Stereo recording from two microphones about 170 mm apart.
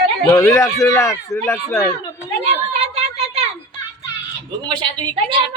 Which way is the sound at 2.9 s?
35° right (ahead or behind).